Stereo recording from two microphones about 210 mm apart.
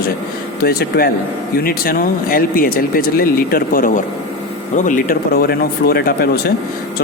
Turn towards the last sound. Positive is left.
turn(degrees=45)  # may be behind; listen again after turning